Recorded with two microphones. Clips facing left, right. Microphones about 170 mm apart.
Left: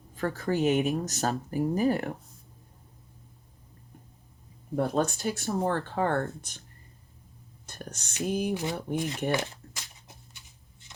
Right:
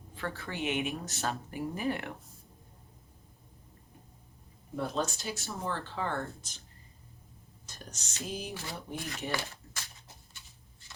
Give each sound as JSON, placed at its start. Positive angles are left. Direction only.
{"t": 0.1, "sound": "speech", "side_deg": 40}
{"t": 4.7, "sound": "speech", "side_deg": 50}
{"t": 7.7, "sound": "speech", "side_deg": 55}
{"t": 9.3, "sound": "speech", "side_deg": 20}
{"t": 10.8, "sound": "shuffling cards", "side_deg": 20}